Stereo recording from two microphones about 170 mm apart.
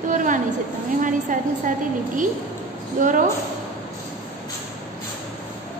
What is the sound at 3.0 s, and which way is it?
Speech, 50° right (ahead or behind).